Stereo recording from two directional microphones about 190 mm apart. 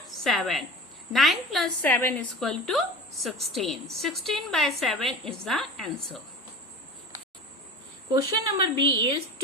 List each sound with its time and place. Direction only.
0.3 s a woman's voice: centre (ahead or behind)
8.1 s a woman's voice: 25° right (ahead or behind)